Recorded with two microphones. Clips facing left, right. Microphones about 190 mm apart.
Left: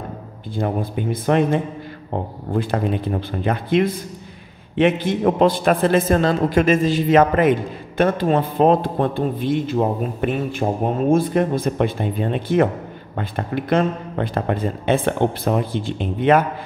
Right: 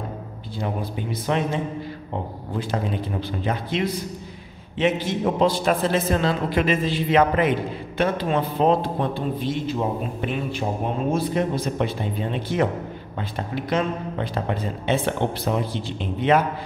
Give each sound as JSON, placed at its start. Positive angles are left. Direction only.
{"t": 0.6, "sound": "a man's voice", "side_deg": 55}